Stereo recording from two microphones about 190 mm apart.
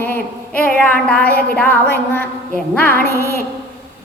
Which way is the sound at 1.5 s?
10° left (ahead or behind).